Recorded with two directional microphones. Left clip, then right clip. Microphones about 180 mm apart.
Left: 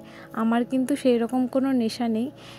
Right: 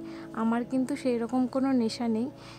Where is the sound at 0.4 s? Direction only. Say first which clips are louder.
Left 5 dB; 20° left (ahead or behind).